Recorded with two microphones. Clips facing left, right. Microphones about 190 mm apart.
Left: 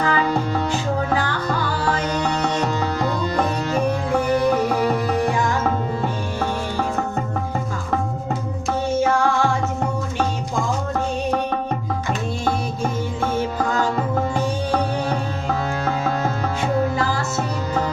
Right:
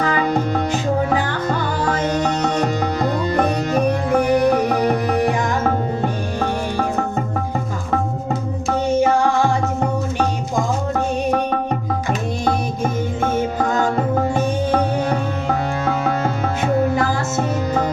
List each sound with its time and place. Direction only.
0.0 s music: 20° right (ahead or behind)
3.8 s music: 20° right (ahead or behind)